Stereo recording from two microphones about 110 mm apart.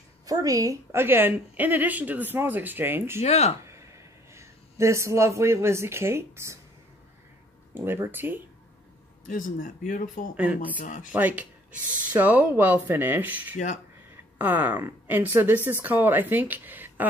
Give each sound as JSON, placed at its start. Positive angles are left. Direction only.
{"t": 0.3, "sound": "a woman's voice", "side_deg": -35}
{"t": 3.2, "sound": "speech", "side_deg": 75}
{"t": 3.6, "sound": "a sound", "side_deg": -25}
{"t": 7.7, "sound": "a woman's voice", "side_deg": -20}
{"t": 10.3, "sound": "speech", "side_deg": -15}